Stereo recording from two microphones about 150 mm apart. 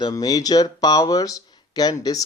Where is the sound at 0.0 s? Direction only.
25° left (ahead or behind).